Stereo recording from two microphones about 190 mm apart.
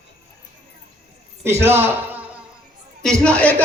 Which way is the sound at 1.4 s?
15° right (ahead or behind).